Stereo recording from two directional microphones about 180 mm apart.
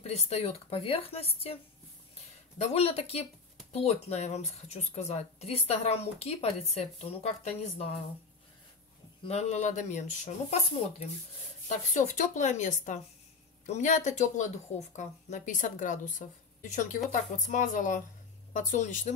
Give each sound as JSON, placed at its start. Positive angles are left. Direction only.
{"t": 0.0, "sound": "a woman's voice", "side_deg": 35}
{"t": 2.6, "sound": "a woman's voice", "side_deg": 35}
{"t": 9.2, "sound": "a woman's voice", "side_deg": 35}
{"t": 11.7, "sound": "a woman's voice", "side_deg": 45}